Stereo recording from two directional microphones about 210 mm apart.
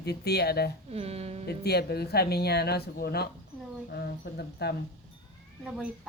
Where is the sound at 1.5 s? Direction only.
50° left (ahead or behind).